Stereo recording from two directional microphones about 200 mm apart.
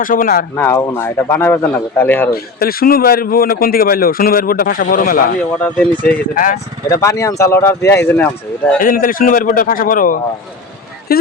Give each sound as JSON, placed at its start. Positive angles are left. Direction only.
{"t": 0.0, "sound": "speech", "side_deg": 45}
{"t": 0.5, "sound": "speech", "side_deg": 10}
{"t": 2.3, "sound": "speech", "side_deg": 50}
{"t": 5.5, "sound": "speech", "side_deg": 5}
{"t": 6.1, "sound": "speech", "side_deg": 40}
{"t": 6.9, "sound": "speech", "side_deg": 15}
{"t": 8.8, "sound": "speech", "side_deg": 45}